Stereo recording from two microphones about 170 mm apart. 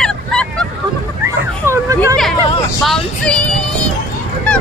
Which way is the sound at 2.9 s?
5° left (ahead or behind).